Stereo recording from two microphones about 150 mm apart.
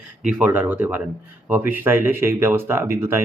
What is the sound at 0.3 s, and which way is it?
Speech, 10° right (ahead or behind).